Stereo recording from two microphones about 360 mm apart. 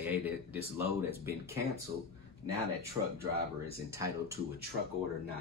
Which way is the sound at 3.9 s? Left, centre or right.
Centre.